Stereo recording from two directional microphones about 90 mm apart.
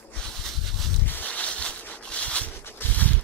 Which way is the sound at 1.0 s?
20° left (ahead or behind).